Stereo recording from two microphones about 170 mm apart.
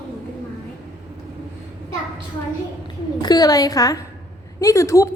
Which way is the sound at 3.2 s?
25° left (ahead or behind).